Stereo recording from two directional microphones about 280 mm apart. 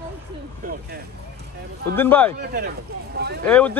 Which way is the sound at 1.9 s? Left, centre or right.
Centre.